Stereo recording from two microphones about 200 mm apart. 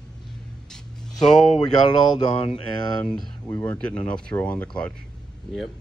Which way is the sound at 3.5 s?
15° left (ahead or behind).